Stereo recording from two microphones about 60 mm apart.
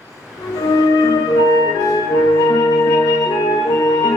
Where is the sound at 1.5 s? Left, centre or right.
Left.